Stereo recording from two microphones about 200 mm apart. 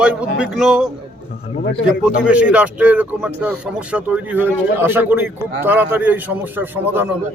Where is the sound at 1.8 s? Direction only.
5° right (ahead or behind).